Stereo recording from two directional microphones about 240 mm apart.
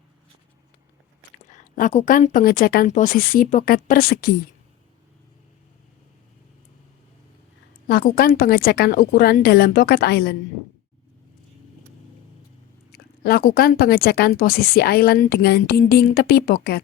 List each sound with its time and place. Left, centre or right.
1.5 s speech: left
7.9 s speech: left
12.9 s speech: left